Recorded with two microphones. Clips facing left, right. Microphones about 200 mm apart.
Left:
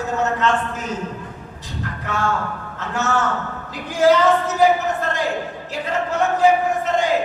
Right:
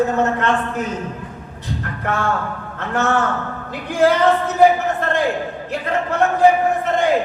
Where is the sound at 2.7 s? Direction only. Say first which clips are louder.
Right 3 dB; 55° right (ahead or behind).